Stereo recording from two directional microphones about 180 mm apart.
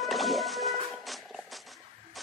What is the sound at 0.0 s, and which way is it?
Music, centre (ahead or behind).